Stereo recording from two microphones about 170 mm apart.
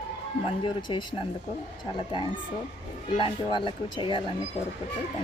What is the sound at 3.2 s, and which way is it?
Speech, 30° left (ahead or behind).